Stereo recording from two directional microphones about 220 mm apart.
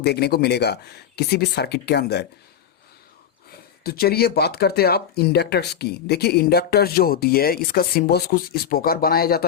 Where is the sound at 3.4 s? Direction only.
45° left (ahead or behind).